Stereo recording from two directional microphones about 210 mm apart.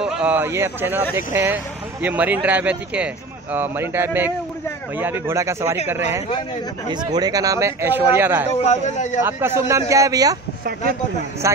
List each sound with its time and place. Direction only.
0.0 s speech: 5° right (ahead or behind)
6.9 s speech: 20° right (ahead or behind)
8.5 s speech: 35° left (ahead or behind)
9.2 s speech: 10° right (ahead or behind)
11.4 s speech: 15° right (ahead or behind)